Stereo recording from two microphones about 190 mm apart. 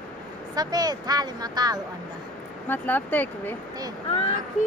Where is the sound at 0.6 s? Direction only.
20° right (ahead or behind).